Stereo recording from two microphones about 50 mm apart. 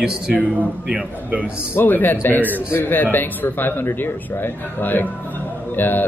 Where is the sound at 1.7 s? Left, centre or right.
Left.